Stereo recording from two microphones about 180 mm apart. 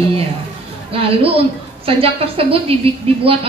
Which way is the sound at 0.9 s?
30° right (ahead or behind).